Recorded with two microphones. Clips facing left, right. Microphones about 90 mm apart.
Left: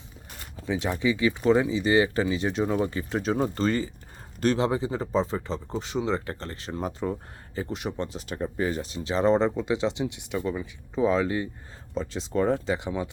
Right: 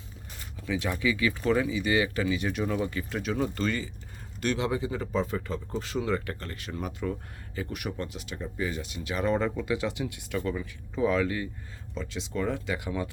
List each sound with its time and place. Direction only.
0.5 s speech: 30° left (ahead or behind)
8.3 s speech: 45° left (ahead or behind); by 11.4 s 25° left (ahead or behind)
11.9 s speech: 35° left (ahead or behind)